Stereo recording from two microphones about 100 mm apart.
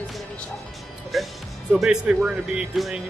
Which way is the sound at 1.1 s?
Centre (ahead or behind).